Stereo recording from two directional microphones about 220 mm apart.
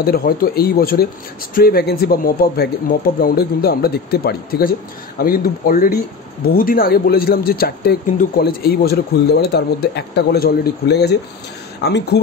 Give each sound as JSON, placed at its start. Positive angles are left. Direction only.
{"t": 0.0, "sound": "speech", "side_deg": 45}